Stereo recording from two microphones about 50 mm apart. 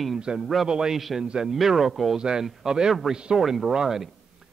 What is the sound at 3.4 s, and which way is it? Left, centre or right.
Speech, centre.